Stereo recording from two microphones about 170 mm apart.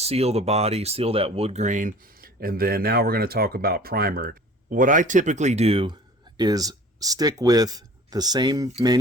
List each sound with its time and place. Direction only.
0.0 s speech: 35° right (ahead or behind)